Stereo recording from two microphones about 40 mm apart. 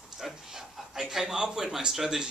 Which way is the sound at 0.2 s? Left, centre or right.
Centre.